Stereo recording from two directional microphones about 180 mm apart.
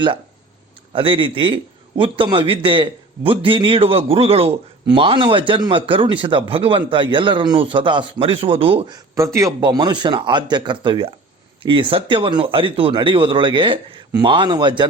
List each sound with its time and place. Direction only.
0.9 s a man's voice: 30° right (ahead or behind)
9.1 s a man's voice: 15° right (ahead or behind)